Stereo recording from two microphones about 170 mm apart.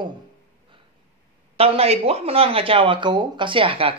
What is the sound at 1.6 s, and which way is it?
Speech, 35° right (ahead or behind).